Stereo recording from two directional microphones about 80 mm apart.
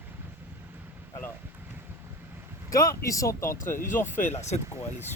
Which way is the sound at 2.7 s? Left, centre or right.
Left.